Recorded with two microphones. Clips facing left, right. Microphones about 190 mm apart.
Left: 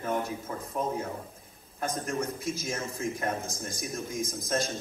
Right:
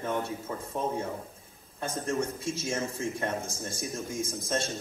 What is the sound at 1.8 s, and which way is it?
A man's voice, 30° right (ahead or behind).